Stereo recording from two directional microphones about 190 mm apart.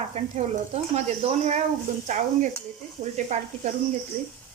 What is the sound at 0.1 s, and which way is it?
Speech, 35° right (ahead or behind).